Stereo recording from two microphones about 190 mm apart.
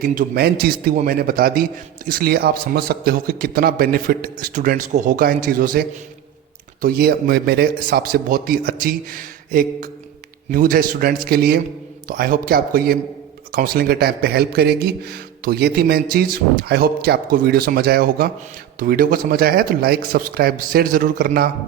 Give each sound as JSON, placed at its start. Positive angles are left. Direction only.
{"t": 0.0, "sound": "a man's voice", "side_deg": -45}
{"t": 6.8, "sound": "a man's voice", "side_deg": -50}